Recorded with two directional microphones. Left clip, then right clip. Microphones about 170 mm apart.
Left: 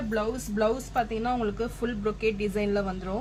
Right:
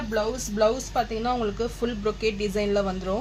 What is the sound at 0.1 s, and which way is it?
Speech, 35° right (ahead or behind).